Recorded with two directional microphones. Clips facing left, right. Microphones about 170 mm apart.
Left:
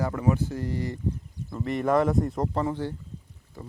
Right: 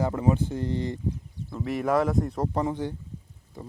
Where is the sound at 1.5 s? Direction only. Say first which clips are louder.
Left 1 dB; 5° right (ahead or behind).